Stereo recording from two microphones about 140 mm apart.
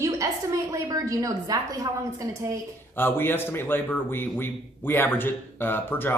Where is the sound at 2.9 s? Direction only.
15° left (ahead or behind).